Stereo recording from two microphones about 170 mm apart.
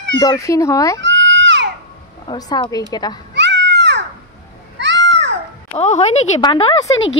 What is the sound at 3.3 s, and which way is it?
Children playing, 90° right.